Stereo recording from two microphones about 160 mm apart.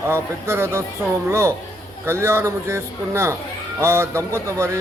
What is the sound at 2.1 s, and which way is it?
Speech, 15° right (ahead or behind).